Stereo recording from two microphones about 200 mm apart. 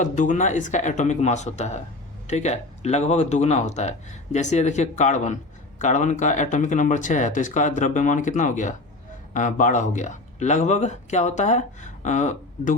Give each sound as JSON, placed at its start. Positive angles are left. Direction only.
{"t": 0.0, "sound": "speech", "side_deg": 40}